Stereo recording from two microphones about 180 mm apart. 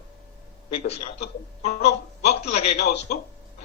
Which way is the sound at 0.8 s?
35° left (ahead or behind).